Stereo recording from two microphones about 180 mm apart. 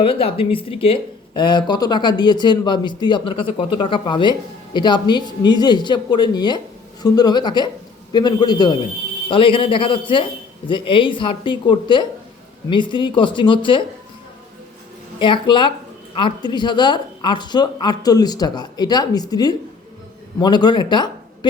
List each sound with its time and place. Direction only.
0.0 s speech: 30° left (ahead or behind)
15.2 s speech: 25° left (ahead or behind)